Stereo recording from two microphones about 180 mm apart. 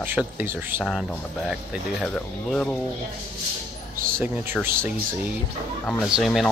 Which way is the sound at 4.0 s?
50° right (ahead or behind).